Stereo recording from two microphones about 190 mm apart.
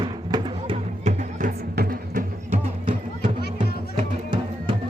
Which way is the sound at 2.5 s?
25° right (ahead or behind).